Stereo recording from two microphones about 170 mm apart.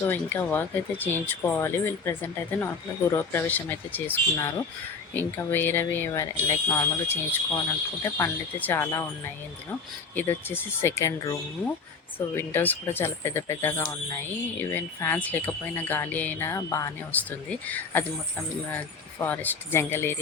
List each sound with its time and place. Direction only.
0.1 s speech: 10° left (ahead or behind)
10.2 s speech: 10° left (ahead or behind)
19.2 s speech: 10° left (ahead or behind)